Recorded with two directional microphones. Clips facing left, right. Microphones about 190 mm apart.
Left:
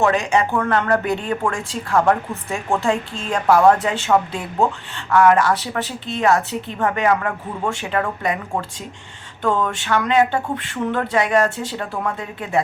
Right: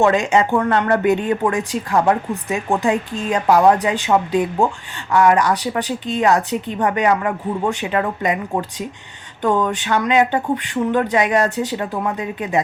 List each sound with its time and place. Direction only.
0.0 s a woman's voice: 20° right (ahead or behind)